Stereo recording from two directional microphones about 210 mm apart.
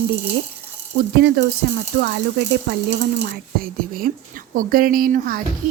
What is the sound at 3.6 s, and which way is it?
A woman's voice, 45° right (ahead or behind).